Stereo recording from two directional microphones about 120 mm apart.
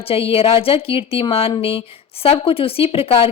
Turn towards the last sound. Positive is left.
turn(degrees=50)  # may be behind; listen again after turning